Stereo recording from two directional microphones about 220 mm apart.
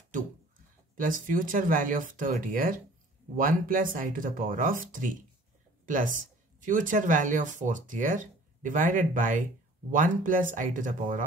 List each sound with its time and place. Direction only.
1.3 s speech: 40° right (ahead or behind)